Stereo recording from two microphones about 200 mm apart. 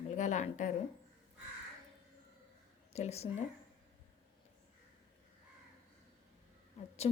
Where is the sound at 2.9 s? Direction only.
30° left (ahead or behind).